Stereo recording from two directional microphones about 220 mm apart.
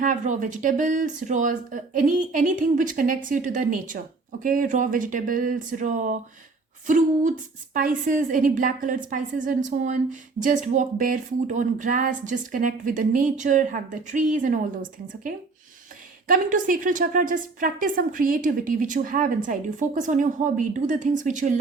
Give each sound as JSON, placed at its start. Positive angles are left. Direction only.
{"t": 0.0, "sound": "speech", "side_deg": -35}